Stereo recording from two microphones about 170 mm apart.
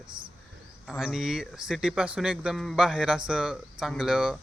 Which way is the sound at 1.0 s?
5° right (ahead or behind).